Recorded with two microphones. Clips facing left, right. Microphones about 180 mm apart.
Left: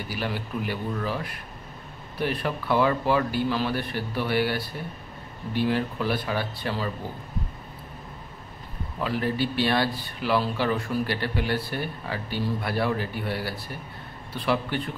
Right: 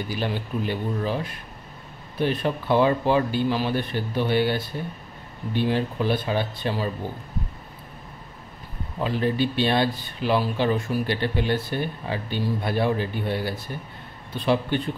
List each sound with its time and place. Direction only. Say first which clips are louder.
0.1 s speech: even; 20° right (ahead or behind)
9.0 s speech: right 3 dB; 20° right (ahead or behind)